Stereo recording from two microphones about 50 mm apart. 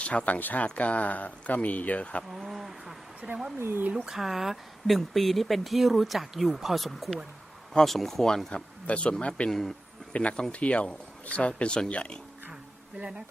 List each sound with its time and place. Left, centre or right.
0.0 s speech: left
2.3 s speech: centre
3.2 s speech: right
3.6 s speech: right
3.9 s speech: centre
7.7 s speech: centre
8.9 s speech: left
9.5 s speech: centre
10.1 s speech: left
13.0 s speech: centre